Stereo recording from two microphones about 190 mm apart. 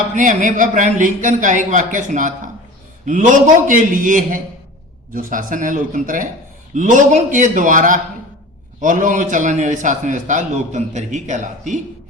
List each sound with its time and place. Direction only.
0.2 s a man's voice: 40° right (ahead or behind)